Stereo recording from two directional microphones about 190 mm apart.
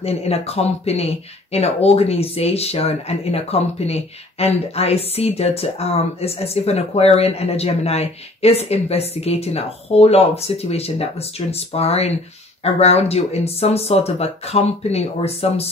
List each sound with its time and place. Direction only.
0.0 s speech: 30° left (ahead or behind)